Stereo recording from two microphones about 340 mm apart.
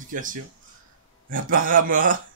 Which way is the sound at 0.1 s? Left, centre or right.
Right.